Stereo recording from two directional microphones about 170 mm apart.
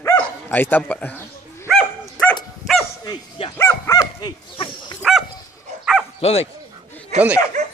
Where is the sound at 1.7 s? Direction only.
5° left (ahead or behind).